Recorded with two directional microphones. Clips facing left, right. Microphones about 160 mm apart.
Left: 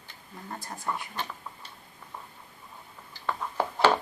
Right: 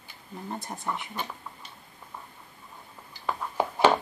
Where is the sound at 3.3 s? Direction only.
15° right (ahead or behind).